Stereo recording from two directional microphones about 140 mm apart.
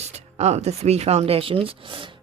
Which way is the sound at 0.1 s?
50° right (ahead or behind).